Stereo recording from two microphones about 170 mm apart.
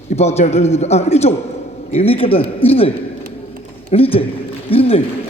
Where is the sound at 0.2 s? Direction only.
40° left (ahead or behind).